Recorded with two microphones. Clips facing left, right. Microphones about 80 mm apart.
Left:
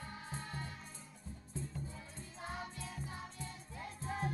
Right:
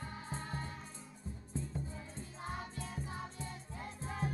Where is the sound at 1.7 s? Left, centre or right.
Right.